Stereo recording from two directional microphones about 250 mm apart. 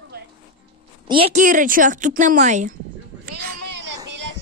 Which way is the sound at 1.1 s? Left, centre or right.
Right.